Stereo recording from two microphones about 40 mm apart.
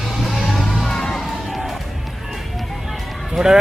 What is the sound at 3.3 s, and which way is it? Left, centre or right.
Speech, centre.